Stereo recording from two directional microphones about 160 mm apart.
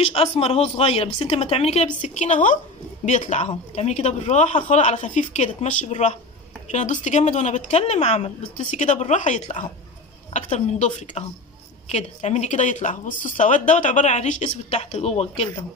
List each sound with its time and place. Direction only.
0.1 s a woman's voice: 40° left (ahead or behind)